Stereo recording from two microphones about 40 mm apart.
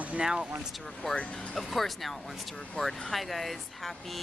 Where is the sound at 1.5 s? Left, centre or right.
Centre.